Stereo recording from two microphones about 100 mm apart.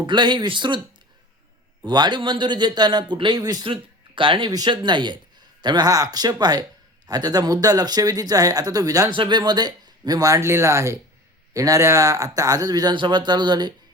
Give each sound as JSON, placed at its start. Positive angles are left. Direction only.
{"t": 0.0, "sound": "speech", "side_deg": -50}
{"t": 1.8, "sound": "speech", "side_deg": -45}
{"t": 3.7, "sound": "speech", "side_deg": -55}
{"t": 4.5, "sound": "speech", "side_deg": -45}
{"t": 9.1, "sound": "speech", "side_deg": -50}